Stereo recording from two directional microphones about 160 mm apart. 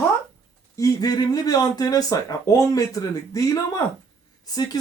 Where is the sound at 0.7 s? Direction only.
20° left (ahead or behind).